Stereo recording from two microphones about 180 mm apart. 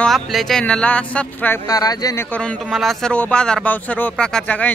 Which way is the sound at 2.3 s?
5° left (ahead or behind).